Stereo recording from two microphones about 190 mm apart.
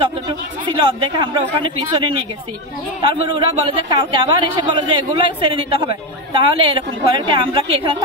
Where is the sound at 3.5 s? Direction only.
25° right (ahead or behind).